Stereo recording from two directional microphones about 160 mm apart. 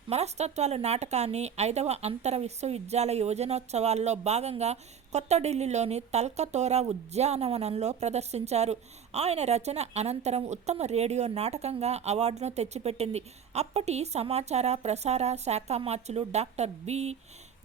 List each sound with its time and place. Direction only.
0.1 s speech: 40° right (ahead or behind)